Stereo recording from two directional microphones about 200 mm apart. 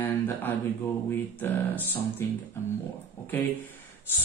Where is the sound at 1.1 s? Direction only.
10° left (ahead or behind).